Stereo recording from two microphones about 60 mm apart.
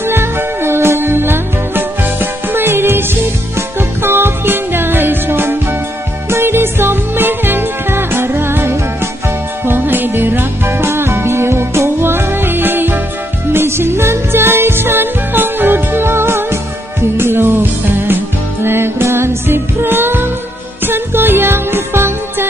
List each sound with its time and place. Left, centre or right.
0.0 s music: right